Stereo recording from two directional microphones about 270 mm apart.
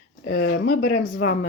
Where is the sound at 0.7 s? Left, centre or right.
Left.